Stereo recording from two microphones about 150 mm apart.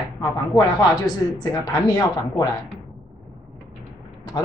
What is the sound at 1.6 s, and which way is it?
Speech, 25° left (ahead or behind).